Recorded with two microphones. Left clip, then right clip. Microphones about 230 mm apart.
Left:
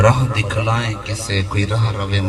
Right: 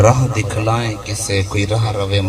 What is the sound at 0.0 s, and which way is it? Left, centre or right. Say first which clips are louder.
A man's voice: right 2 dB; left.